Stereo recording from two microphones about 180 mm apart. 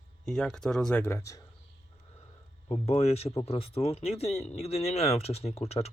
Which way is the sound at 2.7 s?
35° left (ahead or behind).